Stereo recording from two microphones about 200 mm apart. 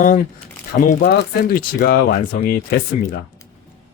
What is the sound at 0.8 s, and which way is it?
Speech, 45° left (ahead or behind).